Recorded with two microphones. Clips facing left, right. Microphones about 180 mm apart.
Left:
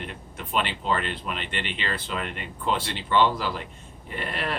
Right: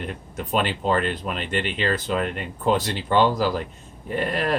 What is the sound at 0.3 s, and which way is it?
Speech, 40° right (ahead or behind).